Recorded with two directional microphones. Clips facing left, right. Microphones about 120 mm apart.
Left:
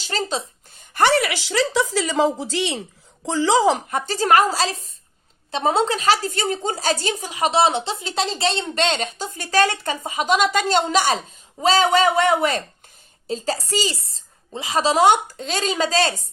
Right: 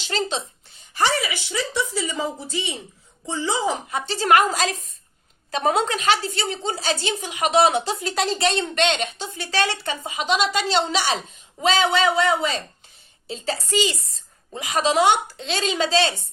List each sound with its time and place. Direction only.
0.1 s a woman's voice: 40° left (ahead or behind)
0.9 s a woman's voice: 60° left (ahead or behind); by 3.8 s 90° left
3.8 s a woman's voice: 45° left (ahead or behind)
13.2 s a woman's voice: 40° left (ahead or behind)